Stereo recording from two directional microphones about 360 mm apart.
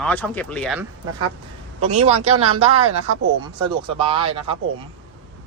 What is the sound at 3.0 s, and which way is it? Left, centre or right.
Speech, right.